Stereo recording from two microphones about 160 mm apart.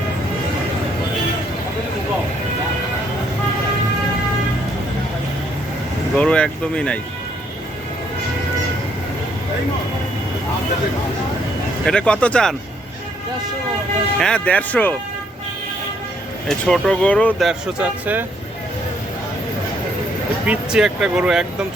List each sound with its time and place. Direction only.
6.1 s speech: 5° left (ahead or behind)
11.9 s speech: 5° left (ahead or behind)
14.2 s speech: 5° left (ahead or behind)
16.5 s speech: 5° left (ahead or behind)
20.4 s speech: 5° right (ahead or behind)